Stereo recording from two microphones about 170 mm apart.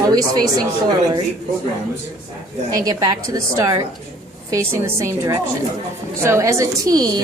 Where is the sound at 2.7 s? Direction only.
20° right (ahead or behind).